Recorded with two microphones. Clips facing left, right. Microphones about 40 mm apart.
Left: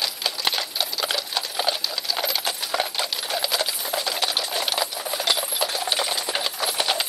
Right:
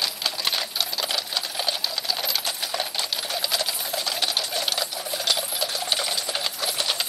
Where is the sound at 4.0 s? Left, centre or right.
Centre.